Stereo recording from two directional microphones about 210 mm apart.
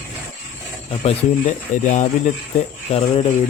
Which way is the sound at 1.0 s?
30° left (ahead or behind).